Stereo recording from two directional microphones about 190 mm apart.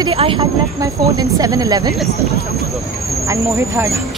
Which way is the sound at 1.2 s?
20° right (ahead or behind).